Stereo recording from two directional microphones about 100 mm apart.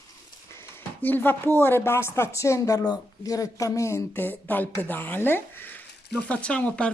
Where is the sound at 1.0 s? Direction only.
20° left (ahead or behind).